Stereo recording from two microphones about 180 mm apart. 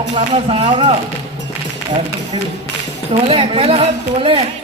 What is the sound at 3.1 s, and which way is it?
Speech, 30° right (ahead or behind).